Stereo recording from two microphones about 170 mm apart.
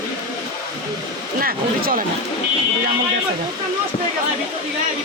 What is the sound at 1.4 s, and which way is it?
Speech, 60° right (ahead or behind).